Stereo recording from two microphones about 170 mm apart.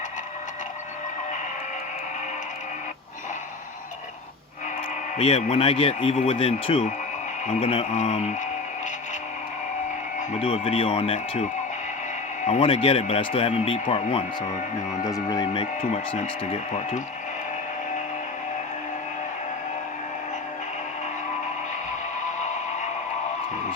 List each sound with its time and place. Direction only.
5.1 s speech: 35° left (ahead or behind)
10.2 s speech: 35° left (ahead or behind)
15.0 s speech: 20° left (ahead or behind)
15.8 s speech: 45° left (ahead or behind)
22.2 s a sound: 45° left (ahead or behind)